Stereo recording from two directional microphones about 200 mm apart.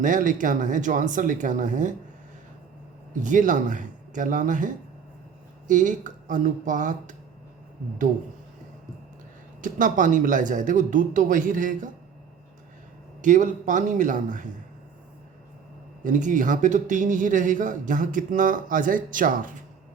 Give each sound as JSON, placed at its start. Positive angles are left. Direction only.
{"t": 0.0, "sound": "a man's voice", "side_deg": -40}
{"t": 3.2, "sound": "a man's voice", "side_deg": -40}
{"t": 9.6, "sound": "a man's voice", "side_deg": -40}
{"t": 13.2, "sound": "a man's voice", "side_deg": -40}
{"t": 16.0, "sound": "a man's voice", "side_deg": -40}